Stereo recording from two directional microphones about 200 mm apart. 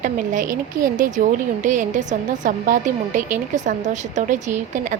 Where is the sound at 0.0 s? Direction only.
40° right (ahead or behind).